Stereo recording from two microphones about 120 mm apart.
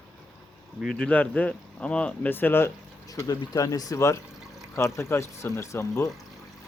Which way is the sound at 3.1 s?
30° left (ahead or behind).